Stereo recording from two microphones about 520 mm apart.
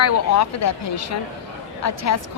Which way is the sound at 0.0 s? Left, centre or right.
Left.